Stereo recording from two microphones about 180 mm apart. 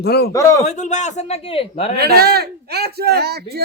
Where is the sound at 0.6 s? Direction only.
40° left (ahead or behind).